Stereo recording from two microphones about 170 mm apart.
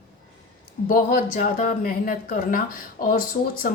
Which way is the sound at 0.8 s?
55° left (ahead or behind).